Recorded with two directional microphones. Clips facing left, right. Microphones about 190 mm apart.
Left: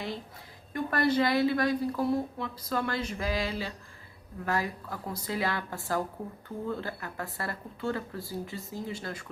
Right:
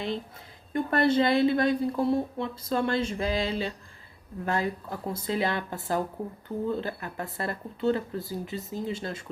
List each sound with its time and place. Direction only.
0.7 s a woman's voice: 25° right (ahead or behind)